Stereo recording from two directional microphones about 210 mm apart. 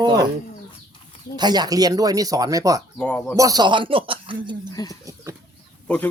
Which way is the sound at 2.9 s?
5° left (ahead or behind).